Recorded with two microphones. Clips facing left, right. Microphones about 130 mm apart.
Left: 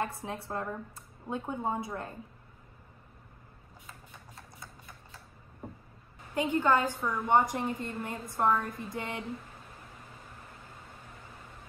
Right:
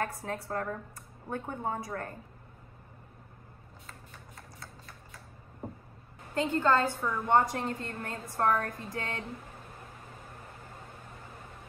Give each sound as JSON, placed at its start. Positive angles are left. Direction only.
{"t": 0.0, "sound": "speech", "side_deg": 20}
{"t": 6.3, "sound": "speech", "side_deg": 15}
{"t": 7.0, "sound": "a woman's voice", "side_deg": 0}
{"t": 7.2, "sound": "speech", "side_deg": 15}